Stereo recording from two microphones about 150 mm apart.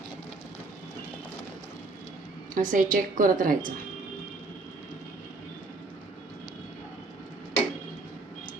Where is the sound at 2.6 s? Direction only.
60° right (ahead or behind).